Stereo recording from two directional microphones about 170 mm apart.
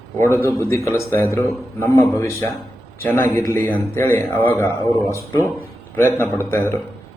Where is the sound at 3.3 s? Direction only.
15° left (ahead or behind).